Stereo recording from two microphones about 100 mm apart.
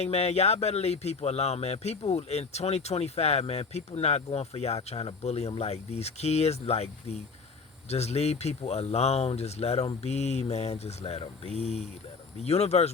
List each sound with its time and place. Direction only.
0.0 s speech: 90° left